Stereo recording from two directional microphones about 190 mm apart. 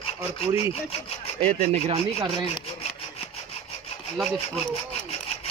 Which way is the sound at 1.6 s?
35° right (ahead or behind).